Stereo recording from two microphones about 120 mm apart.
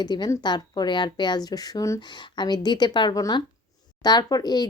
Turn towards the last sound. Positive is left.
turn(degrees=35)  # may be behind; listen again after turning